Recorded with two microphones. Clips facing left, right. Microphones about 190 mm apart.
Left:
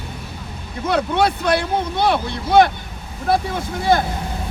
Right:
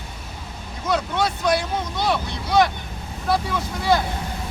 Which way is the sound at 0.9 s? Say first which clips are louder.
Left 4 dB; 60° left (ahead or behind).